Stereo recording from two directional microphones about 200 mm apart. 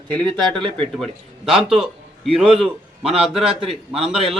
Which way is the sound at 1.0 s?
Centre (ahead or behind).